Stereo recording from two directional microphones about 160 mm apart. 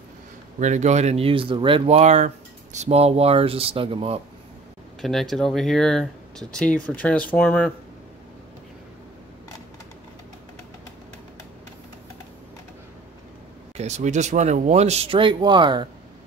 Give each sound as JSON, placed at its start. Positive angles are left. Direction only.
{"t": 0.6, "sound": "speech", "side_deg": -50}
{"t": 5.0, "sound": "speech", "side_deg": 0}
{"t": 13.7, "sound": "speech", "side_deg": -45}